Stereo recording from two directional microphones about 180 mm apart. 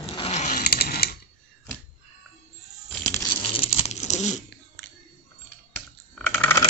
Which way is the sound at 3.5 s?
35° left (ahead or behind).